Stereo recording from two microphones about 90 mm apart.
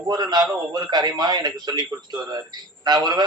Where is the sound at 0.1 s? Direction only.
50° right (ahead or behind).